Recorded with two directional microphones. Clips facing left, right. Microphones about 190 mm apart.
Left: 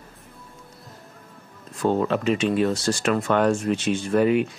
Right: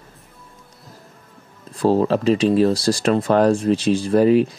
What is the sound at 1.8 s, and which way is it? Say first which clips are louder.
Speech: right 5 dB; 35° right (ahead or behind).